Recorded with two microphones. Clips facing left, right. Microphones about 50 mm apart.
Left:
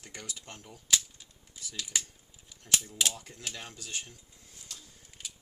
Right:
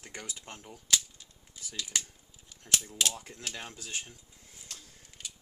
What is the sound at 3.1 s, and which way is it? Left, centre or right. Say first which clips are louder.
Speech: right 1 dB; right.